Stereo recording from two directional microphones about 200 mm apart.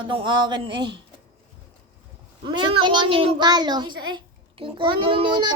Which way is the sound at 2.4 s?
25° right (ahead or behind).